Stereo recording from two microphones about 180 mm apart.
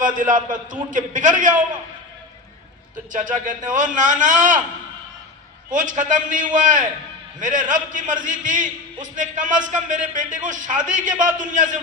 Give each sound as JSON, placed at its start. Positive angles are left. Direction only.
{"t": 0.0, "sound": "a man's voice", "side_deg": -45}
{"t": 3.1, "sound": "a man's voice", "side_deg": -45}
{"t": 5.7, "sound": "a man's voice", "side_deg": -45}